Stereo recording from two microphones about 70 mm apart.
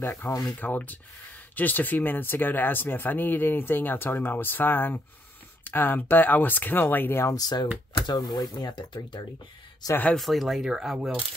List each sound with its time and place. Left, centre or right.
0.2 s speech: left
7.2 s speech: left
9.8 s speech: left
10.1 s speech: centre